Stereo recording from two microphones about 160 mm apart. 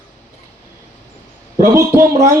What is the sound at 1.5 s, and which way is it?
Speech, 20° right (ahead or behind).